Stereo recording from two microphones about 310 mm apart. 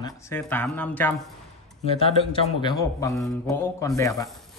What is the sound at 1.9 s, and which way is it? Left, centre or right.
Speech, centre.